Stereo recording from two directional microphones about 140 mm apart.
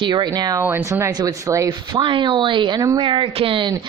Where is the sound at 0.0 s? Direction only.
30° right (ahead or behind).